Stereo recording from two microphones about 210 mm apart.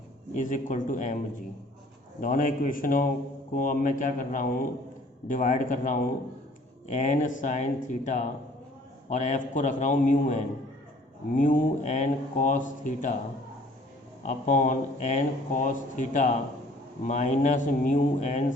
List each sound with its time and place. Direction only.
0.3 s speech: 35° left (ahead or behind)
2.2 s speech: 40° left (ahead or behind)
14.3 s speech: 35° left (ahead or behind)